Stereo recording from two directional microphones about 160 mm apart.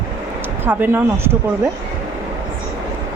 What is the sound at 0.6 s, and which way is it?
Speech, 15° right (ahead or behind).